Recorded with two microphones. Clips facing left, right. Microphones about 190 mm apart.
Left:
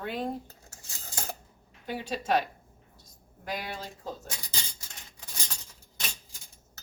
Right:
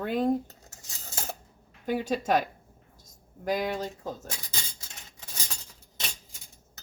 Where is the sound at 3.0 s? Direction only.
45° right (ahead or behind).